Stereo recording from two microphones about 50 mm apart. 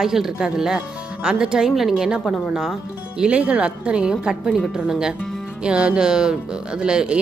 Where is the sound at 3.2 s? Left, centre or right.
Right.